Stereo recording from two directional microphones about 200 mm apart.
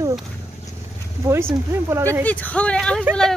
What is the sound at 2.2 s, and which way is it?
Speech, 5° left (ahead or behind).